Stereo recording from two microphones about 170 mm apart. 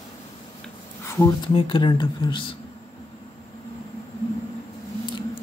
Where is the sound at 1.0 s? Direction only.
15° left (ahead or behind).